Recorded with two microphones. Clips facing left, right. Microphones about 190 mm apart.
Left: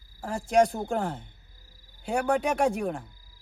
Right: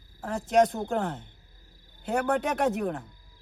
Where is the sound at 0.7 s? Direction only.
10° left (ahead or behind).